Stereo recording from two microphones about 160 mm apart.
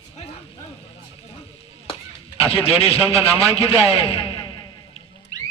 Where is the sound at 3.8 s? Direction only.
40° left (ahead or behind).